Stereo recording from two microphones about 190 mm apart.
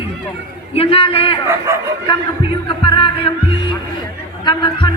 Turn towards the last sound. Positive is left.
turn(degrees=25)  # may be behind; listen again after turning